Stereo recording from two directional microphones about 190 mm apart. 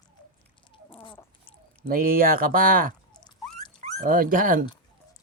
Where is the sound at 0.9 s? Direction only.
25° left (ahead or behind).